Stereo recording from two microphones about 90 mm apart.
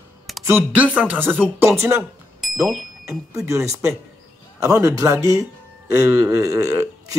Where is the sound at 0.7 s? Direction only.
15° right (ahead or behind).